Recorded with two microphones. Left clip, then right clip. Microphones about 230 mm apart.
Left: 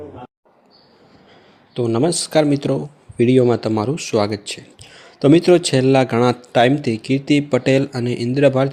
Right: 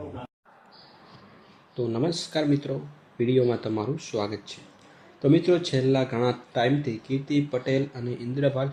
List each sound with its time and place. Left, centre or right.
1.7 s speech: left